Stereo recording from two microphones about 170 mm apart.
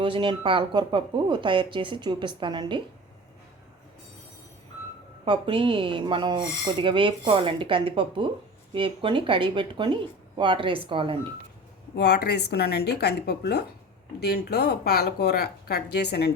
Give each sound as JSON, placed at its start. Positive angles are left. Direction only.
{"t": 0.0, "sound": "speech", "side_deg": -30}
{"t": 5.2, "sound": "speech", "side_deg": -30}
{"t": 11.9, "sound": "speech", "side_deg": 75}